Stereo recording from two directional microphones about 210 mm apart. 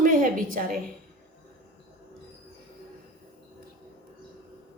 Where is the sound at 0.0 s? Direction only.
40° right (ahead or behind).